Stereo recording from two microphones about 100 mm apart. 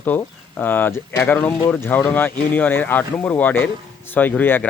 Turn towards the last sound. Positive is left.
turn(degrees=20)  # may be behind; listen again after turning